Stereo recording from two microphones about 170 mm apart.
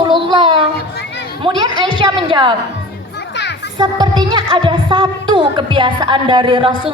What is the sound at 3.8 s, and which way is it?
A woman's voice, 25° right (ahead or behind).